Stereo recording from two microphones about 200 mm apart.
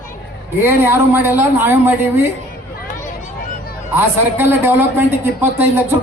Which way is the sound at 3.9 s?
10° right (ahead or behind).